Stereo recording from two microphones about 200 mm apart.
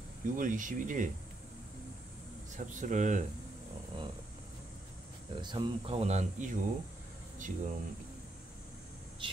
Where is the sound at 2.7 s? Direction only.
40° right (ahead or behind).